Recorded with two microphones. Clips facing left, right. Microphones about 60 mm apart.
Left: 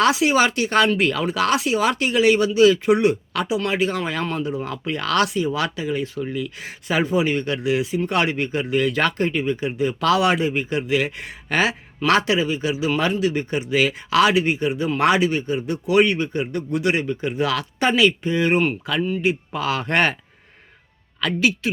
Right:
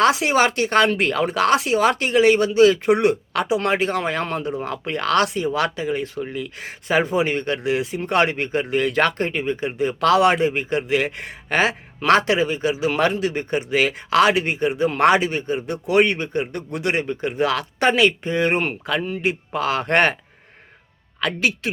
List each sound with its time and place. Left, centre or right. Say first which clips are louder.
0.0 s speech: even; right
17.7 s speech: even; right
21.2 s speech: left 1 dB; right